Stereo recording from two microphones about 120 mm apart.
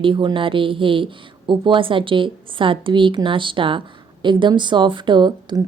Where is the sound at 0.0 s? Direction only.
45° right (ahead or behind).